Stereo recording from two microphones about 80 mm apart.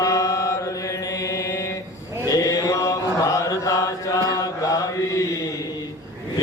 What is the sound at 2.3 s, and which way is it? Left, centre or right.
Mantra, left.